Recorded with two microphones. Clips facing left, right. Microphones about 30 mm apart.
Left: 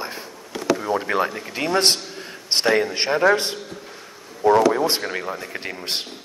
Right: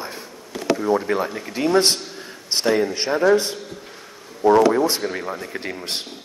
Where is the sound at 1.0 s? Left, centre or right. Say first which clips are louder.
Left 1 dB; centre.